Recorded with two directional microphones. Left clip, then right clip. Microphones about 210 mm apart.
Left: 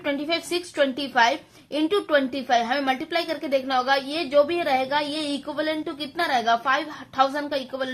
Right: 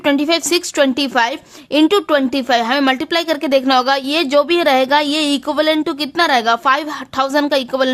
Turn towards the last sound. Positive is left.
turn(degrees=-50)  # may be behind; listen again after turning